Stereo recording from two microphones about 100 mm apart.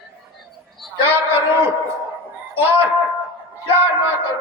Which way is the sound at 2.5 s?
20° right (ahead or behind).